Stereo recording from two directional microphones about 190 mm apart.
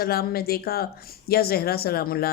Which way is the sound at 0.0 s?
55° left (ahead or behind).